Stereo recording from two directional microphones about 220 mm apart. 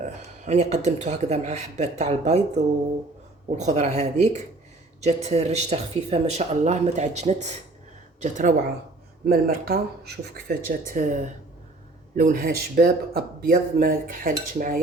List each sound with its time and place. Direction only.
0.0 s speech: 30° right (ahead or behind)